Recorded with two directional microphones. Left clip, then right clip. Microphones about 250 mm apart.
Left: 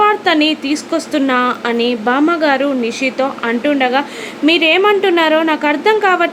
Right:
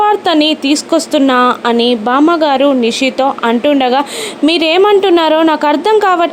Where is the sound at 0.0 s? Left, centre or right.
Centre.